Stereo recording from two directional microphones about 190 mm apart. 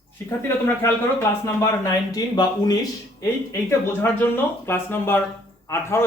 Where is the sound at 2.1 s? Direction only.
20° left (ahead or behind).